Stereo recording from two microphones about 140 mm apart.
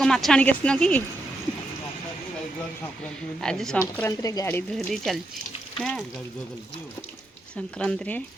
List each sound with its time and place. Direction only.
0.0 s speech: 5° left (ahead or behind)
3.4 s speech: 5° left (ahead or behind)
4.0 s speech: 25° left (ahead or behind)
4.7 s speech: centre (ahead or behind)
7.5 s speech: 5° left (ahead or behind)